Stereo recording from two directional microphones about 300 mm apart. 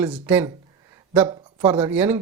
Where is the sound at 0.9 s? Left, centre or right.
Centre.